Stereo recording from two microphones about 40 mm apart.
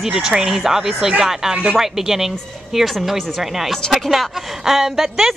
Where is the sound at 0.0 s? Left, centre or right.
Centre.